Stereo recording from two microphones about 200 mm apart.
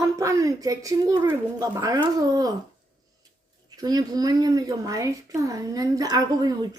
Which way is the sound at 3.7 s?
20° right (ahead or behind).